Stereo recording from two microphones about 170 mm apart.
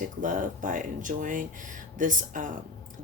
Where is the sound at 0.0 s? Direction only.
50° right (ahead or behind).